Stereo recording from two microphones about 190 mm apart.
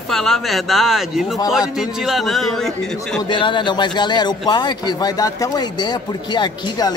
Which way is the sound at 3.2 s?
25° left (ahead or behind).